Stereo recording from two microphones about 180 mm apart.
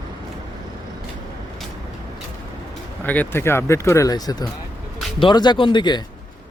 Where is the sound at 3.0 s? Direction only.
10° left (ahead or behind); by 6.0 s 25° left (ahead or behind).